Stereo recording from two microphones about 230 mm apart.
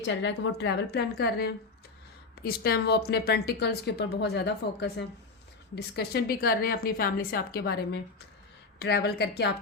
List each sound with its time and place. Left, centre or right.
0.0 s a woman's voice: left